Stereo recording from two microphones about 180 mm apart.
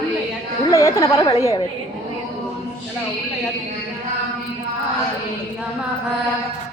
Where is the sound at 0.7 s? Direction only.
15° left (ahead or behind).